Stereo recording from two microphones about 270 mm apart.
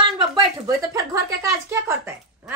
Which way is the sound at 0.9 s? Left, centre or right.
Centre.